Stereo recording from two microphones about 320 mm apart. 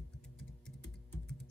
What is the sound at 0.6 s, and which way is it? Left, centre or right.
Typing, centre.